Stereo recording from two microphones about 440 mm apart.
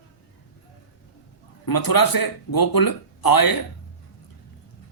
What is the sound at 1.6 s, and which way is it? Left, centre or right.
Speech, left.